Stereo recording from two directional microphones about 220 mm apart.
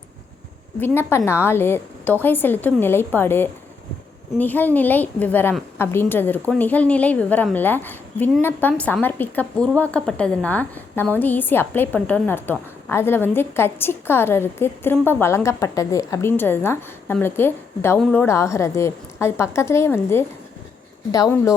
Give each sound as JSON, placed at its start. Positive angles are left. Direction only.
{"t": 0.8, "sound": "a woman's voice", "side_deg": 10}